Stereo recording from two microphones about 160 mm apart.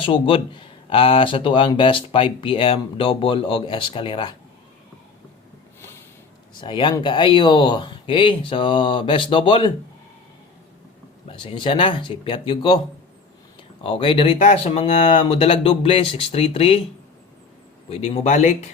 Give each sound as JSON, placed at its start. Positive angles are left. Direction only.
{"t": 0.0, "sound": "speech", "side_deg": 30}
{"t": 6.6, "sound": "speech", "side_deg": 30}
{"t": 11.3, "sound": "speech", "side_deg": 35}
{"t": 13.8, "sound": "speech", "side_deg": 35}
{"t": 15.3, "sound": "speech", "side_deg": 35}
{"t": 17.8, "sound": "speech", "side_deg": 40}